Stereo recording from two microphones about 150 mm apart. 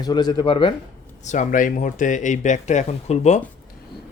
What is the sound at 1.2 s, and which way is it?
Speech, 55° left (ahead or behind).